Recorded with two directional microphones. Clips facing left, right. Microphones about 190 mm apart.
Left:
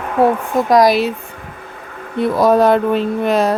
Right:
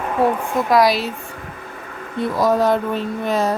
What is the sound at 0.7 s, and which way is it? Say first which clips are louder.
Speech: left 4 dB; 45° left (ahead or behind).